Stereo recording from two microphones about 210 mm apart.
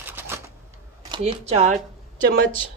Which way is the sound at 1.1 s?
25° right (ahead or behind).